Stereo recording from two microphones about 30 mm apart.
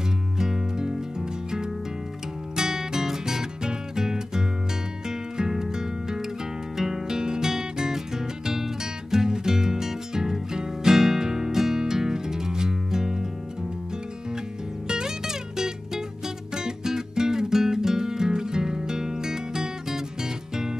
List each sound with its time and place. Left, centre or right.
0.4 s music: centre
2.5 s music: centre
7.2 s music: right
14.9 s music: right